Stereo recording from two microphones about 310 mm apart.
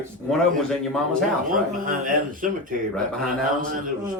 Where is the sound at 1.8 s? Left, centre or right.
Right.